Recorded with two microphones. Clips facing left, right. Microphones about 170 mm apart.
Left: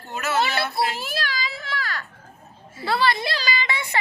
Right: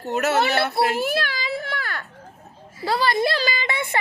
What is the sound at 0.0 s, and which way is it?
A child's voice, 70° right (ahead or behind).